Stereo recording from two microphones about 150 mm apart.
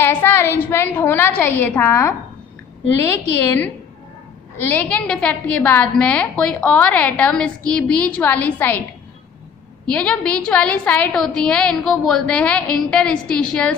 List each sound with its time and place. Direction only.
0.0 s a woman's voice: 15° left (ahead or behind)
4.7 s a woman's voice: 10° left (ahead or behind)
9.8 s a woman's voice: 5° left (ahead or behind)